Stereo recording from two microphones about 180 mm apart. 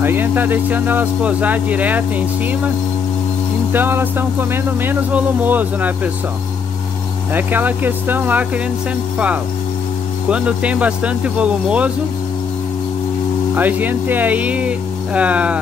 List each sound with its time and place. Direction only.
0.0 s speech: 10° right (ahead or behind)
3.7 s speech: 10° right (ahead or behind)
7.3 s speech: 10° right (ahead or behind)
10.3 s speech: 5° right (ahead or behind)
13.6 s speech: 10° right (ahead or behind)